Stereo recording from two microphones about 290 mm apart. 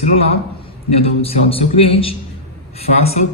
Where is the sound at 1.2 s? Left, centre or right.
Centre.